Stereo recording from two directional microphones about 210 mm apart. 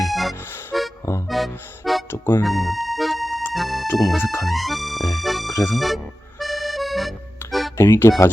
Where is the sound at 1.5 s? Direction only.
10° left (ahead or behind).